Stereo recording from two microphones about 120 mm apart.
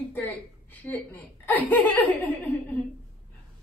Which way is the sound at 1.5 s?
15° left (ahead or behind).